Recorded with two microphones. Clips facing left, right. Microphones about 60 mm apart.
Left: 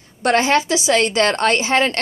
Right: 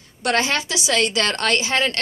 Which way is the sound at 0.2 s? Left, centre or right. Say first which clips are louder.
Left 5 dB; left.